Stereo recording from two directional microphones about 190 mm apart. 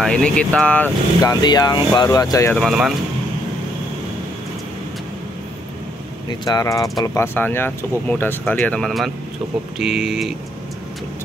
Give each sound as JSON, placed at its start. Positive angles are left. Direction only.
{"t": 0.0, "sound": "speech", "side_deg": 5}
{"t": 1.2, "sound": "speech", "side_deg": 20}
{"t": 2.5, "sound": "speech", "side_deg": 0}
{"t": 6.2, "sound": "speech", "side_deg": 20}